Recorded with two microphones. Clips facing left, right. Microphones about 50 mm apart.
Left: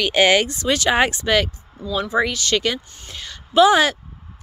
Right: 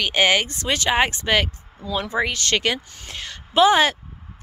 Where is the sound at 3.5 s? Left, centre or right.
Right.